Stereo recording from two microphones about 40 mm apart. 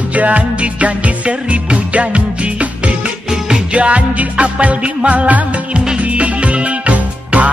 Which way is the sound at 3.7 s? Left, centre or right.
Right.